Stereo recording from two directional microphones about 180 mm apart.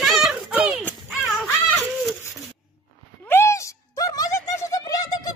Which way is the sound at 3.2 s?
15° left (ahead or behind).